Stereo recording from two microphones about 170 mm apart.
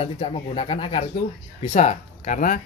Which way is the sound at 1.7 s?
45° left (ahead or behind).